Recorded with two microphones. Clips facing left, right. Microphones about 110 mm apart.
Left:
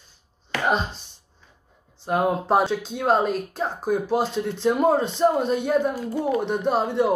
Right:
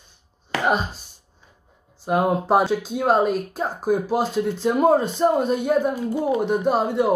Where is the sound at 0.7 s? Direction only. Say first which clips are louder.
Right 1 dB; 5° right (ahead or behind).